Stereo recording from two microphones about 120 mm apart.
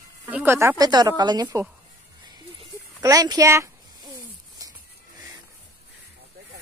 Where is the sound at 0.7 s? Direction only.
35° right (ahead or behind).